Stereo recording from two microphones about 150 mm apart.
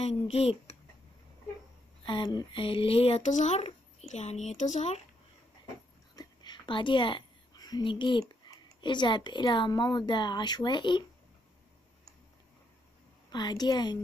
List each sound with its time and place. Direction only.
0.0 s speech: 40° left (ahead or behind)
2.0 s speech: 30° left (ahead or behind); by 5.0 s 50° left (ahead or behind)
6.1 s a woman's voice: 30° left (ahead or behind)
13.3 s a woman's voice: 25° left (ahead or behind)